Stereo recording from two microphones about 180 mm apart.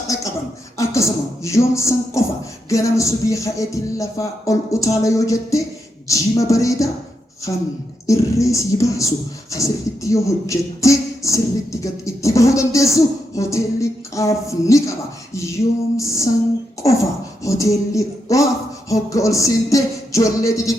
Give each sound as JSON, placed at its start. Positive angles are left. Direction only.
{"t": 0.1, "sound": "a sound", "side_deg": 20}
{"t": 0.8, "sound": "speech", "side_deg": 15}
{"t": 8.0, "sound": "speech", "side_deg": 15}